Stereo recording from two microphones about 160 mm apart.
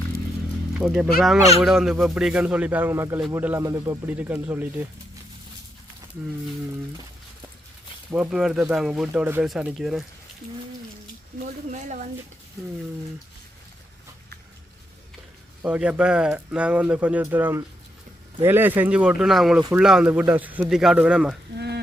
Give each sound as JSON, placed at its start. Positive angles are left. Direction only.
{"t": 0.8, "sound": "speech", "side_deg": -5}
{"t": 8.1, "sound": "speech", "side_deg": -5}
{"t": 11.7, "sound": "speech", "side_deg": -50}
{"t": 15.6, "sound": "speech", "side_deg": -5}